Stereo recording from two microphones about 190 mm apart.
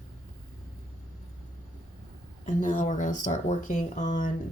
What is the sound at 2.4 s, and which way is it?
Speech, 45° left (ahead or behind).